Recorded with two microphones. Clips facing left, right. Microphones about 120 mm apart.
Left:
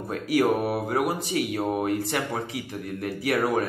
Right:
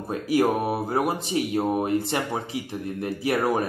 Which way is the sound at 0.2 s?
25° right (ahead or behind).